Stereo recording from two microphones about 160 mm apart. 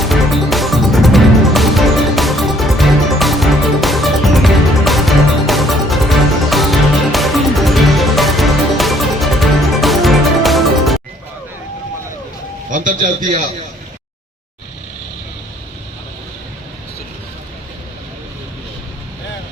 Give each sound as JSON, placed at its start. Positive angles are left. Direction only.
{"t": 0.0, "sound": "music", "side_deg": 0}
{"t": 12.7, "sound": "a man's voice", "side_deg": -55}